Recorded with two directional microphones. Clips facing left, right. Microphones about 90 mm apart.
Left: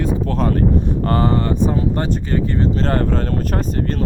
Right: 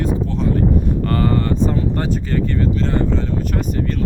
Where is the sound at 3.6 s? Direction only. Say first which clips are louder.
Even; 35° left (ahead or behind).